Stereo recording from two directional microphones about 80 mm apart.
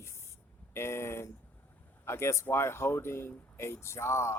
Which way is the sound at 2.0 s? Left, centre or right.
Left.